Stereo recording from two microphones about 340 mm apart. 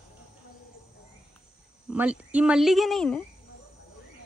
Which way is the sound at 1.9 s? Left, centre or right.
Centre.